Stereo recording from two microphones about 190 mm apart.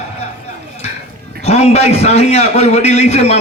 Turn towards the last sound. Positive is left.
turn(degrees=35)  # may be behind; listen again after turning